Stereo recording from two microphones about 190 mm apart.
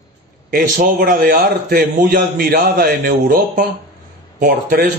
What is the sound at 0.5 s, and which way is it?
A man's voice, 50° right (ahead or behind).